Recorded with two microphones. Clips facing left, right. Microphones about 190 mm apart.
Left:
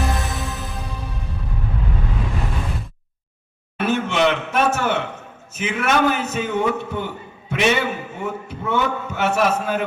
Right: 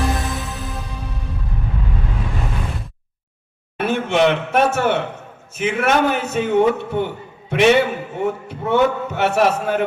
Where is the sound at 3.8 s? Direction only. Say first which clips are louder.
Right 2 dB; 55° right (ahead or behind).